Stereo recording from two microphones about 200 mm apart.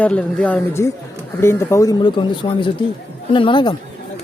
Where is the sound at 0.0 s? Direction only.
5° left (ahead or behind).